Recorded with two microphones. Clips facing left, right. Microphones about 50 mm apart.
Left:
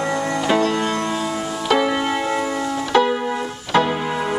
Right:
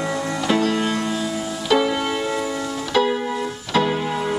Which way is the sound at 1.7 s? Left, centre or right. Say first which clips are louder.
Even; centre.